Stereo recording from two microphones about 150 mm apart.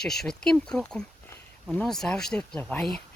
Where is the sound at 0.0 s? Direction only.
5° left (ahead or behind).